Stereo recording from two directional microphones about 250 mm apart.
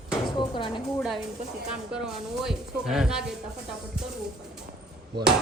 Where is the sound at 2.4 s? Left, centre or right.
Centre.